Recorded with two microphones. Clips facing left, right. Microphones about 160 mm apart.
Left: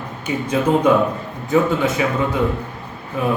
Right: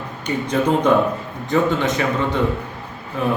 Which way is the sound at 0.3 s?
5° left (ahead or behind).